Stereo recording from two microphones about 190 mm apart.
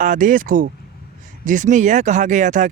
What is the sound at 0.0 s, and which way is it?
Speech, 40° right (ahead or behind).